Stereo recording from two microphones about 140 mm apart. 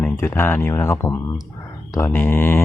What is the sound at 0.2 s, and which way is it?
Speech, 15° left (ahead or behind).